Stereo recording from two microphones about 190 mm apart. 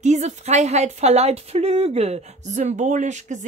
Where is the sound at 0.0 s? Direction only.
35° right (ahead or behind).